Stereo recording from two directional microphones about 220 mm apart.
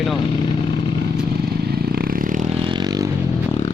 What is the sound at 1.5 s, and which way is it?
Vehicle, 45° right (ahead or behind).